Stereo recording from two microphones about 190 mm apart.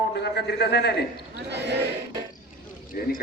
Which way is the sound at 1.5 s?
65° right (ahead or behind).